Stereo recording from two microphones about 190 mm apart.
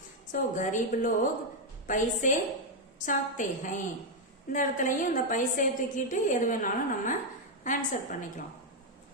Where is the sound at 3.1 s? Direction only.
45° left (ahead or behind).